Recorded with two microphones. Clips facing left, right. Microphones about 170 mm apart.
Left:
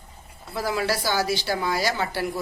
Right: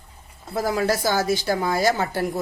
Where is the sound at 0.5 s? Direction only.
45° right (ahead or behind).